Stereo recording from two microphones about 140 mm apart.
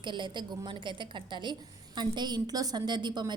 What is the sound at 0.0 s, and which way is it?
A woman's voice, 35° right (ahead or behind).